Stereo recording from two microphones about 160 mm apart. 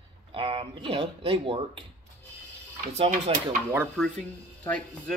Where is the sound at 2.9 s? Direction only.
40° right (ahead or behind).